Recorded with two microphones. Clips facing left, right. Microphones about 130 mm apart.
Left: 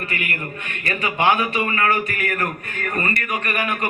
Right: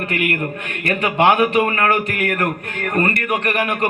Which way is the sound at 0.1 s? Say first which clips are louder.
Right 7 dB; 65° right (ahead or behind).